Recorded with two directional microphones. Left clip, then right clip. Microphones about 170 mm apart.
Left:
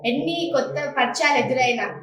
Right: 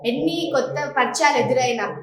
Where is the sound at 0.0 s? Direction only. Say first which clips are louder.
Right 1 dB; 20° right (ahead or behind).